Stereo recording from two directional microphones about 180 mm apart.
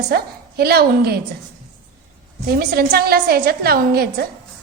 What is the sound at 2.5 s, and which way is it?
A woman's voice, 60° right (ahead or behind).